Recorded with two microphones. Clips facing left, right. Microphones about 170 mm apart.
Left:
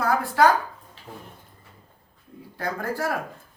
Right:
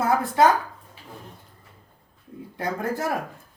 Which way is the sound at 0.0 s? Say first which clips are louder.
Right 1 dB; 20° right (ahead or behind).